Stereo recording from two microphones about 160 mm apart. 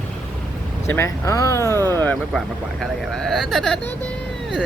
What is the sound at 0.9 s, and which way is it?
Speech, 20° left (ahead or behind).